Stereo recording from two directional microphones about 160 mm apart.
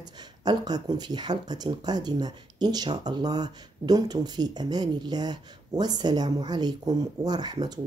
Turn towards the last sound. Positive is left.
turn(degrees=-25)  # may be behind; listen again after turning